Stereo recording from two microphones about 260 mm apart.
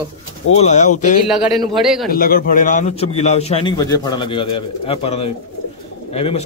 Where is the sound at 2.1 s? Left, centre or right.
Left.